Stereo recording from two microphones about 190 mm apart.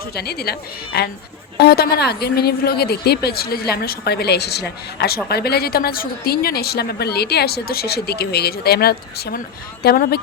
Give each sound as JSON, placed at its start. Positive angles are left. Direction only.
{"t": 0.1, "sound": "a woman's voice", "side_deg": 55}